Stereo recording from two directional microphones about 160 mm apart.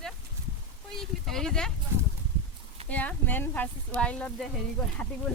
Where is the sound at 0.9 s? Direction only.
5° left (ahead or behind).